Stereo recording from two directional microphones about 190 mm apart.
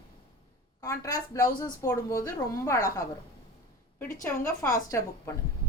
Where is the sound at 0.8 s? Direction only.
15° left (ahead or behind).